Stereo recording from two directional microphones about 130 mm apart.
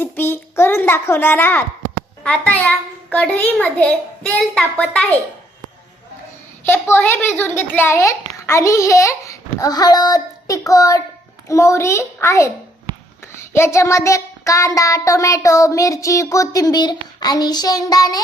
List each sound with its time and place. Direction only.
0.0 s a child's voice: 15° left (ahead or behind)
6.7 s child singing: 15° left (ahead or behind)